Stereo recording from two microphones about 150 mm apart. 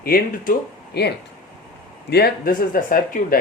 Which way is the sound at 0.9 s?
90° left.